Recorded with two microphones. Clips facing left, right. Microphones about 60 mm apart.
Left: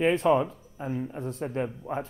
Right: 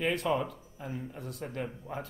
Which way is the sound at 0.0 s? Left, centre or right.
Left.